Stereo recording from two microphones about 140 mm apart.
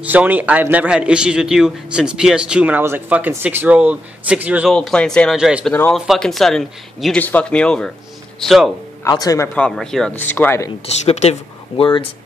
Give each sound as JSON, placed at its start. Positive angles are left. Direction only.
{"t": 0.0, "sound": "a man's voice", "side_deg": -10}
{"t": 4.6, "sound": "speech", "side_deg": 5}
{"t": 5.4, "sound": "a man's voice", "side_deg": -10}
{"t": 5.7, "sound": "speech", "side_deg": 10}
{"t": 9.0, "sound": "speech", "side_deg": 25}
{"t": 9.6, "sound": "speech", "side_deg": 5}
{"t": 10.1, "sound": "speech", "side_deg": 15}
{"t": 11.1, "sound": "speech", "side_deg": 45}